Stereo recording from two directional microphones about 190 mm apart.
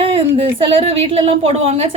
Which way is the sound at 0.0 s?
30° right (ahead or behind).